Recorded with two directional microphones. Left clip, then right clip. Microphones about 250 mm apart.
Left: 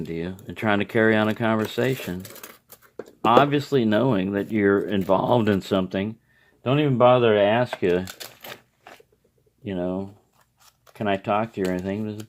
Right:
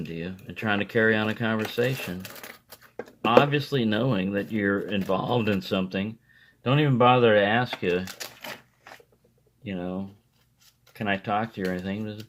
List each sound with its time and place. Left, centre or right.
0.1 s speech: left
3.2 s speech: left
9.6 s speech: left